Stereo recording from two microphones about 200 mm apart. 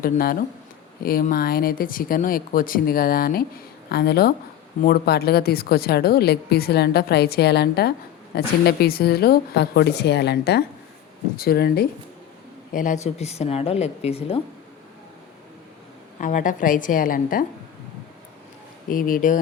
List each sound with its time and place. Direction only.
0.0 s a woman's voice: 45° left (ahead or behind)
12.7 s a woman's voice: 40° left (ahead or behind)
16.2 s a woman's voice: 40° left (ahead or behind)
18.9 s a woman's voice: 45° left (ahead or behind)